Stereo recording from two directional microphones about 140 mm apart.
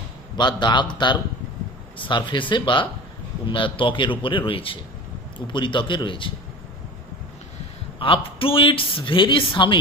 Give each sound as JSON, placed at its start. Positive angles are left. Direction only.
{"t": 0.4, "sound": "a man's voice", "side_deg": 30}
{"t": 8.0, "sound": "a man's voice", "side_deg": 40}